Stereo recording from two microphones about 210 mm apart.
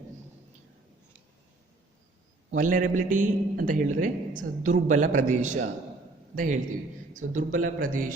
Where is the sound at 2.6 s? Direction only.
40° right (ahead or behind).